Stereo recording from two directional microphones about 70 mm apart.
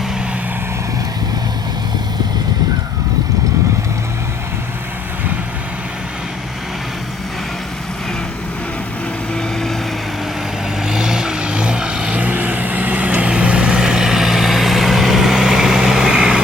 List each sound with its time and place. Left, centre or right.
9.3 s vehicle: centre
10.8 s vehicle: centre